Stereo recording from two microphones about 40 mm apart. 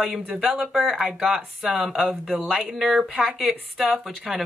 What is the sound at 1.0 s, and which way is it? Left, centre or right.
Speech, right.